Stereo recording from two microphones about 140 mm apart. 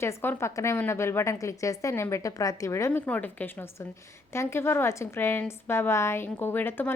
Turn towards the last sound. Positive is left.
turn(degrees=15)  # may be behind; listen again after turning